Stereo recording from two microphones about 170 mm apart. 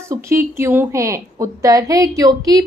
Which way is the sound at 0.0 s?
15° right (ahead or behind).